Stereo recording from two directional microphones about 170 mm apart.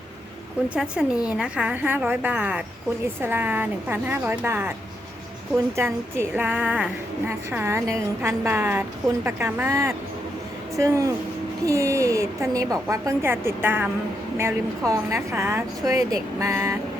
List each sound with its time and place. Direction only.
0.7 s a woman's voice: 5° right (ahead or behind)
5.7 s a woman's voice: 15° right (ahead or behind)